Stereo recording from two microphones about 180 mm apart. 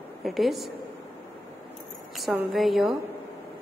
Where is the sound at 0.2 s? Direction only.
Centre (ahead or behind).